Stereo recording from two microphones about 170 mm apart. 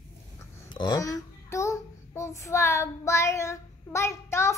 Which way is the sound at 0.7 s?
25° left (ahead or behind).